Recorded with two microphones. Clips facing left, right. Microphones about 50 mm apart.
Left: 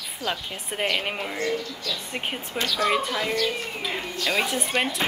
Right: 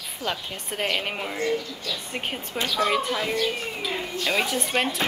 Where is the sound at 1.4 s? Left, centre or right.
Centre.